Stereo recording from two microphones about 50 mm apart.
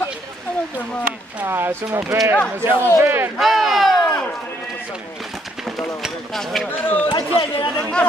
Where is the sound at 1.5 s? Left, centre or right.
Right.